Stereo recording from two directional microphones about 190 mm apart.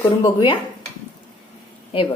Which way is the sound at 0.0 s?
20° left (ahead or behind).